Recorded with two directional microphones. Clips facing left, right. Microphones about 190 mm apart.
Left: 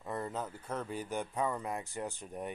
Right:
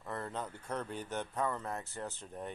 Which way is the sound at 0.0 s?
15° left (ahead or behind).